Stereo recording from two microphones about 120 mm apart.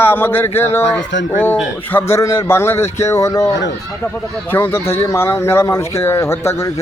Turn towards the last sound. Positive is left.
turn(degrees=25)  # may be behind; listen again after turning